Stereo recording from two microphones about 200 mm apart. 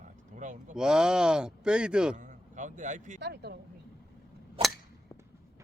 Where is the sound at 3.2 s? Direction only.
55° right (ahead or behind).